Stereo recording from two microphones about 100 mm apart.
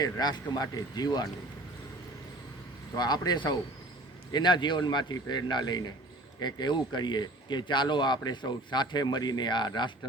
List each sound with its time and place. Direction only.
0.0 s speech: 45° left (ahead or behind)
2.9 s speech: 45° left (ahead or behind)